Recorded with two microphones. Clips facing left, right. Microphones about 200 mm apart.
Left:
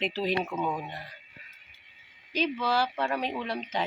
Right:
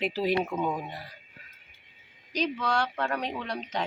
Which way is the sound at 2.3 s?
Centre (ahead or behind).